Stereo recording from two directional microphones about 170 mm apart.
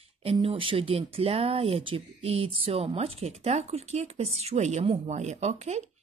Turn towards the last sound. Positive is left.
turn(degrees=-40)  # may be behind; listen again after turning